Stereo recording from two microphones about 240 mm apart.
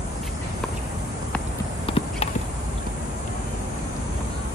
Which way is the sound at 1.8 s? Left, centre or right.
Left.